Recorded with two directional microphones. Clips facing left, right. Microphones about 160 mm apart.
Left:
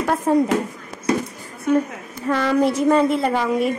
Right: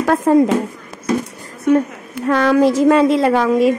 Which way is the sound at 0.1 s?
90° right.